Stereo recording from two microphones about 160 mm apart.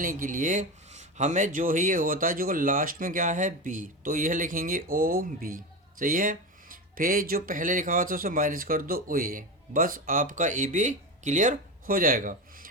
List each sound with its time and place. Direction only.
0.0 s speech: 60° right (ahead or behind)